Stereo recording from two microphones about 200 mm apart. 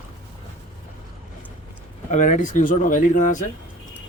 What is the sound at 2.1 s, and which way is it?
Speech, 35° left (ahead or behind).